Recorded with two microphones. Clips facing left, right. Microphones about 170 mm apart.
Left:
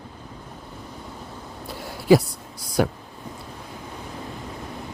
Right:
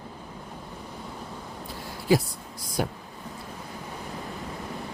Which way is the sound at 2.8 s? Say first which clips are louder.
Left 7 dB; 75° left (ahead or behind).